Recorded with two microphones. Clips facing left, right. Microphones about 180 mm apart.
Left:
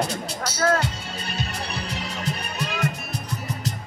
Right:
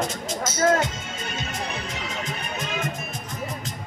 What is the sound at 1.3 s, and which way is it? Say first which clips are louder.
Music: even; 35° left (ahead or behind).